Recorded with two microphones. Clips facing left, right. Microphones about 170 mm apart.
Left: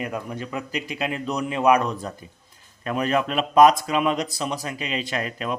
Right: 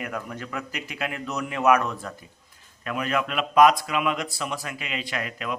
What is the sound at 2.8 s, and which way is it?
Speech, 35° left (ahead or behind).